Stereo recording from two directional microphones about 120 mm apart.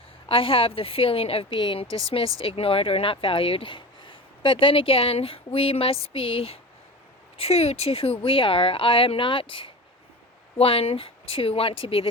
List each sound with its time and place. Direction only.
0.3 s speech: 50° left (ahead or behind)